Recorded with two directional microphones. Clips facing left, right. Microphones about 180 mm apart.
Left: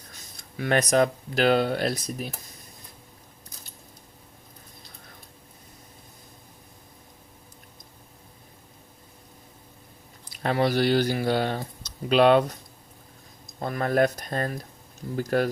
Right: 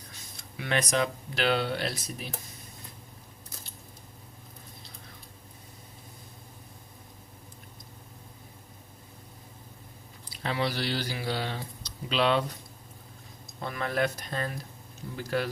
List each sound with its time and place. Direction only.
0.5 s speech: 45° left (ahead or behind)
10.4 s speech: 50° left (ahead or behind)
13.6 s speech: 45° left (ahead or behind)